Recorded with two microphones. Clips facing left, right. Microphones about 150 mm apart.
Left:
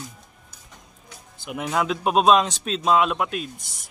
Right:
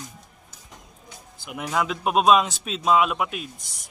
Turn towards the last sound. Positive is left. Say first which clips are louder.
# left 1 dB
turn(degrees=-5)  # may be behind; listen again after turning